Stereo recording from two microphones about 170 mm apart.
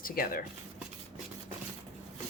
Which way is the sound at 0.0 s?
60° left (ahead or behind).